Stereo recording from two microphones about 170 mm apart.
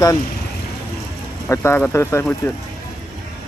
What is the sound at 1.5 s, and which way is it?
Speech, 15° left (ahead or behind).